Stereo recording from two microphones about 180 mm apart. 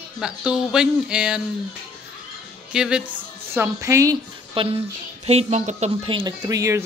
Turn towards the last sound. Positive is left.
turn(degrees=-20)  # may be behind; listen again after turning